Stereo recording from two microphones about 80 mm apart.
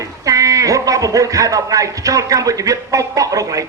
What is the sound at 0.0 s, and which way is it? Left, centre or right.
A man's voice, right.